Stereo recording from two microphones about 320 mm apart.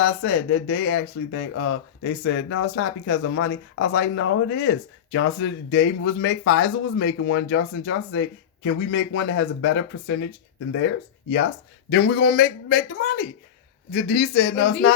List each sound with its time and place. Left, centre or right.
0.0 s speech: left
11.9 s a man's voice: left